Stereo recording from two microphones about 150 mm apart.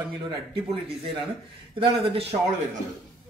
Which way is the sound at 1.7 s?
35° right (ahead or behind).